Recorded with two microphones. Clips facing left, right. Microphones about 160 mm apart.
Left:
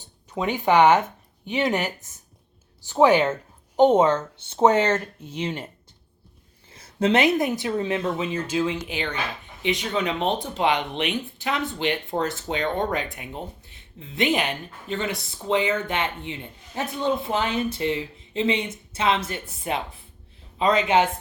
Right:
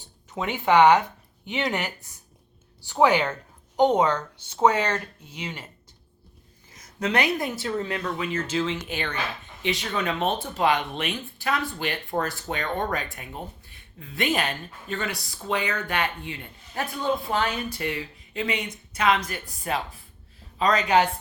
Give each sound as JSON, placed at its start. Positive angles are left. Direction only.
{"t": 0.6, "sound": "speech", "side_deg": 20}
{"t": 6.7, "sound": "speech", "side_deg": 30}